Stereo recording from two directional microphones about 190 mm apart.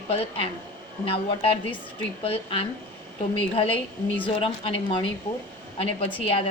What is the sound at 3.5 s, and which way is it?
A woman's voice, 30° left (ahead or behind).